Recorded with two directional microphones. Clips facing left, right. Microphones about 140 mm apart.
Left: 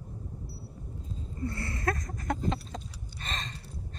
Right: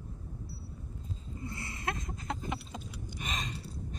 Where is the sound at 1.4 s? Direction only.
20° right (ahead or behind).